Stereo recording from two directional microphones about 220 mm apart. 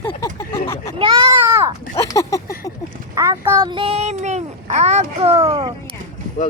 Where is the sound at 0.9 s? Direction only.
25° right (ahead or behind).